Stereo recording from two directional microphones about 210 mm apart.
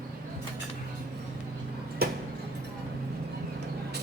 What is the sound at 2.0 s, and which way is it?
Tick-tock, 45° right (ahead or behind).